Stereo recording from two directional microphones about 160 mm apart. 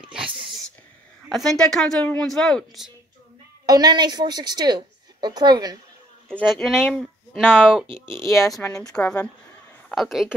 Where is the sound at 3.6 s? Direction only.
25° right (ahead or behind).